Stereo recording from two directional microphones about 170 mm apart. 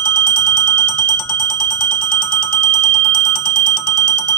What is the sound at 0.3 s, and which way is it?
Bell, 5° left (ahead or behind).